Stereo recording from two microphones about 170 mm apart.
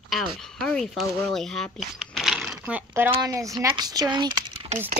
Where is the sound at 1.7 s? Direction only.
Centre (ahead or behind).